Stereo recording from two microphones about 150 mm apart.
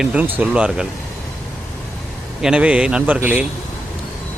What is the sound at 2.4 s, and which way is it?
Speech, 5° right (ahead or behind).